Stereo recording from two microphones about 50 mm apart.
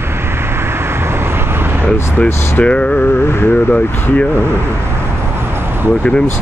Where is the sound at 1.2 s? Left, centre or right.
Right.